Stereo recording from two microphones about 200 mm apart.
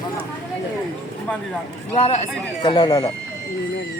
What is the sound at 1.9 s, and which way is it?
A man's voice, 30° left (ahead or behind).